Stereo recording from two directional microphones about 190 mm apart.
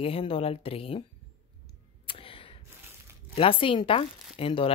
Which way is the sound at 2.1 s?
30° left (ahead or behind).